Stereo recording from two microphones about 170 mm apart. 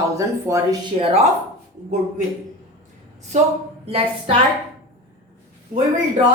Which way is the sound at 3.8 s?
35° right (ahead or behind).